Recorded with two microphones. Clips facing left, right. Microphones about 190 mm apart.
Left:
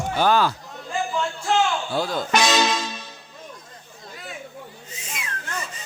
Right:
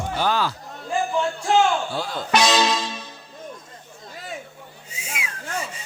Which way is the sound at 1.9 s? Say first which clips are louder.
Left 4 dB; 40° left (ahead or behind).